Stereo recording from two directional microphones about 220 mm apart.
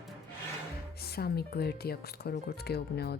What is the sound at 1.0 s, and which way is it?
Speech, 45° left (ahead or behind).